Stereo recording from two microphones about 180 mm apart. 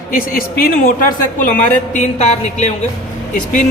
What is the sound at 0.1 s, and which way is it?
A man's voice, 55° left (ahead or behind).